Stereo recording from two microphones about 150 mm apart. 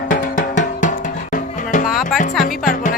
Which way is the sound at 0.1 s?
60° left (ahead or behind).